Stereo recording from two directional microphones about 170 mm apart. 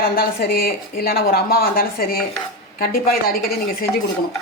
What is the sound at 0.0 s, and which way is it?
Speech, 60° left (ahead or behind).